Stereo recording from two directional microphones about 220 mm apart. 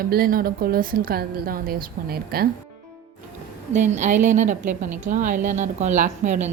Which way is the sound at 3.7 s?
35° right (ahead or behind).